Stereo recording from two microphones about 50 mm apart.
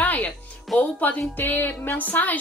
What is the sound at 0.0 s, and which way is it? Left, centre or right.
Music, left.